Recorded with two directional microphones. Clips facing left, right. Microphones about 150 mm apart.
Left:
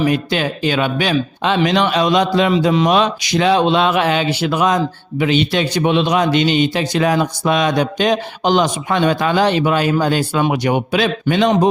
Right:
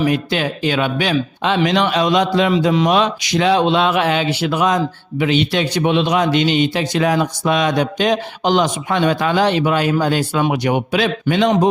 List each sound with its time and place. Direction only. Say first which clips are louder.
0.0 s a man's voice: left 1 dB; 35° left (ahead or behind)